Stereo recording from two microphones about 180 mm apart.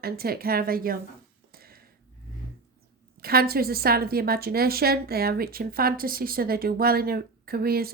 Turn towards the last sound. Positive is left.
turn(degrees=-55)  # may be behind; listen again after turning